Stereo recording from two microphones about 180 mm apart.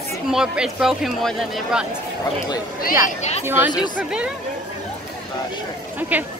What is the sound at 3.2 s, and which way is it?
Speech, 35° left (ahead or behind).